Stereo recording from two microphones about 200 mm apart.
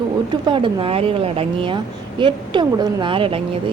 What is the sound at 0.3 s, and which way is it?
Speech, 25° right (ahead or behind).